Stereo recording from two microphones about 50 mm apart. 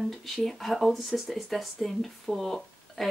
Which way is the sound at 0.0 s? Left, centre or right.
Centre.